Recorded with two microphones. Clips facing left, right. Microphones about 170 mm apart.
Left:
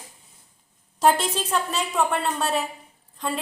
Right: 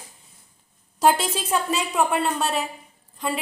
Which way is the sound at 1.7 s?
5° right (ahead or behind).